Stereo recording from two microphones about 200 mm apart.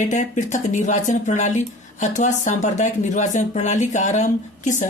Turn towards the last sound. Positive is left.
turn(degrees=40)  # may be behind; listen again after turning